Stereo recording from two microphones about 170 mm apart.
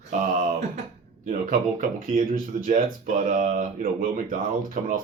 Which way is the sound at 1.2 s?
55° right (ahead or behind).